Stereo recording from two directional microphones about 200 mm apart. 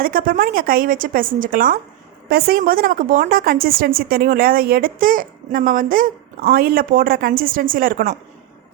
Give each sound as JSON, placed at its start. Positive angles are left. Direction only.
{"t": 0.0, "sound": "a woman's voice", "side_deg": -45}